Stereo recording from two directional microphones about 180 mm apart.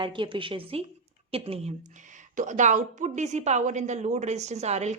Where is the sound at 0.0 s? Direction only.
25° right (ahead or behind).